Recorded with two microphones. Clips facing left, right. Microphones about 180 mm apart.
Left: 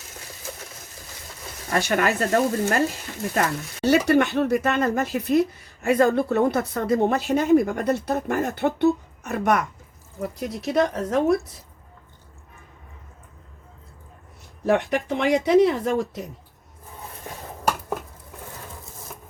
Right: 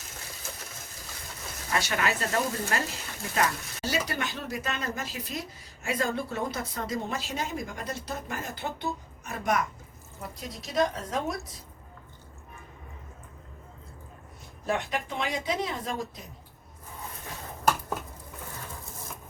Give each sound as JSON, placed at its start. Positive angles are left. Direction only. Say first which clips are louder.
{"t": 1.7, "sound": "speech", "louder": "left 7 dB", "side_deg": 50}
{"t": 3.8, "sound": "speech", "louder": "left 13 dB", "side_deg": 65}
{"t": 14.7, "sound": "speech", "louder": "left 9 dB", "side_deg": 65}